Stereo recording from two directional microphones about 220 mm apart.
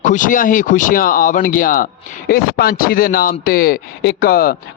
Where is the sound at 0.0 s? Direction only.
35° left (ahead or behind).